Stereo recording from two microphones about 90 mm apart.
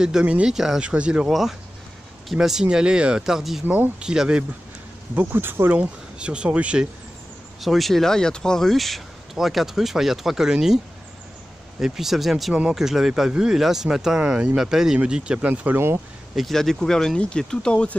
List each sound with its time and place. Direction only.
0.0 s speech: 10° right (ahead or behind)
2.3 s speech: 5° right (ahead or behind)
3.6 s speech: 20° right (ahead or behind)
4.0 s speech: 10° right (ahead or behind)
5.2 s speech: 25° right (ahead or behind)
7.6 s speech: centre (ahead or behind)
11.8 s speech: 5° right (ahead or behind); by 16.0 s 25° right (ahead or behind)
16.3 s speech: centre (ahead or behind)